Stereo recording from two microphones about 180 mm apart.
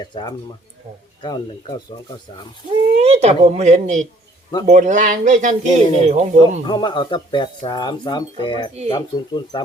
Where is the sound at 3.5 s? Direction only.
40° right (ahead or behind).